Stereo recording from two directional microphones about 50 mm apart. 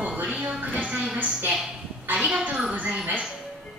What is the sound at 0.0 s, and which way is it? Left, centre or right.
Music, right.